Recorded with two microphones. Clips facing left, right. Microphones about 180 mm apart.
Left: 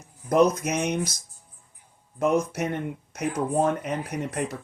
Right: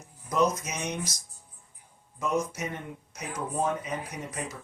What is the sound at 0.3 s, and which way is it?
Speech, 60° left (ahead or behind).